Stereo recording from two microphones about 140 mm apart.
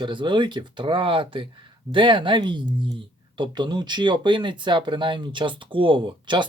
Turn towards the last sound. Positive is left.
turn(degrees=-35)  # may be behind; listen again after turning